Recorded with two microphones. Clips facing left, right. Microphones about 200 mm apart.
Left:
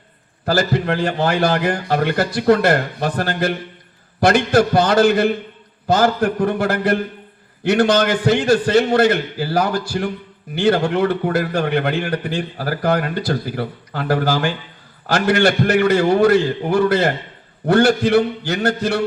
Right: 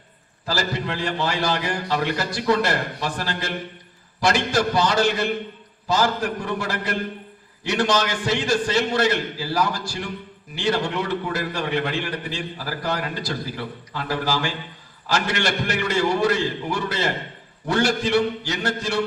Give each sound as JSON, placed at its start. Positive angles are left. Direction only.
{"t": 0.4, "sound": "a man's voice", "side_deg": 55}